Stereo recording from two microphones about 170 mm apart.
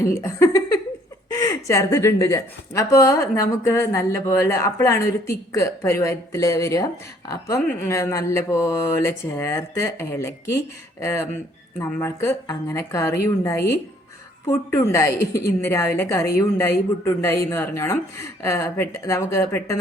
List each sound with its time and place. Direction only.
0.0 s a woman's voice: 15° left (ahead or behind)